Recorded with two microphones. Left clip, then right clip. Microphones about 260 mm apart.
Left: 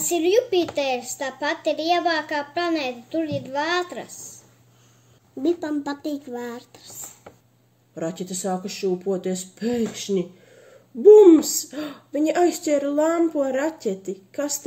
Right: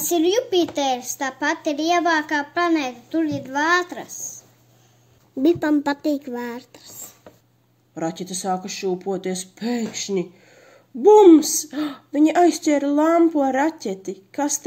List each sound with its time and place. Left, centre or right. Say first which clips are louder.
0.0 s speech: even; right
5.4 s speech: right 6 dB; right